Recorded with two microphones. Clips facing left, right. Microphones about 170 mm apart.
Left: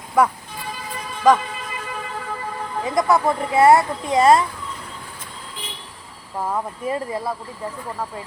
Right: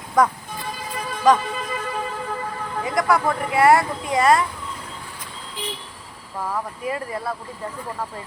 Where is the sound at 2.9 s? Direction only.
20° left (ahead or behind).